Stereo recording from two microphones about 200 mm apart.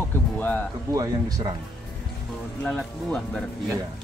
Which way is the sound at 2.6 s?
5° left (ahead or behind).